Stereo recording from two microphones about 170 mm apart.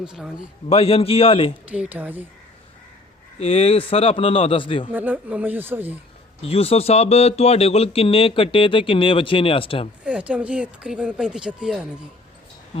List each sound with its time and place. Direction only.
0.0 s a man's voice: 5° right (ahead or behind)
0.7 s speech: 35° left (ahead or behind)
1.6 s speech: 10° right (ahead or behind)
3.4 s speech: 35° left (ahead or behind)
4.9 s speech: 10° right (ahead or behind)
6.4 s speech: 35° left (ahead or behind)
10.0 s speech: 5° right (ahead or behind)